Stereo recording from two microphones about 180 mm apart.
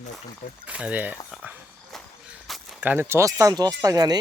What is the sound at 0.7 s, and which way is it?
Speech, 5° right (ahead or behind).